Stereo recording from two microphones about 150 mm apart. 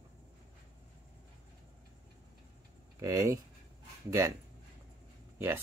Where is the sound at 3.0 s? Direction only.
20° right (ahead or behind).